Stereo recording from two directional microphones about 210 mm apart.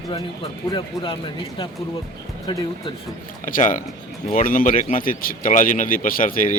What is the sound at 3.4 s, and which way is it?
Speech, 40° left (ahead or behind).